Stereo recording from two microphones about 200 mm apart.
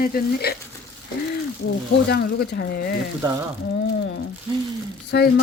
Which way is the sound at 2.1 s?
50° left (ahead or behind).